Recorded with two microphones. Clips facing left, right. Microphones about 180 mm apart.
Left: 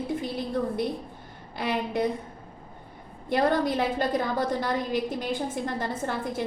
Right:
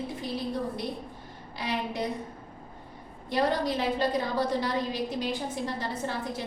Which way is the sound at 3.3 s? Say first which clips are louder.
Left 3 dB; 55° left (ahead or behind).